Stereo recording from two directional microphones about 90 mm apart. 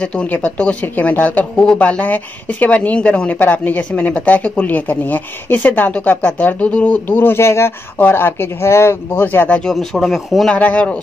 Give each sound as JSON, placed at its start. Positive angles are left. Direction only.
{"t": 0.0, "sound": "speech", "side_deg": 15}
{"t": 9.6, "sound": "speech", "side_deg": 5}
{"t": 10.5, "sound": "speech", "side_deg": 15}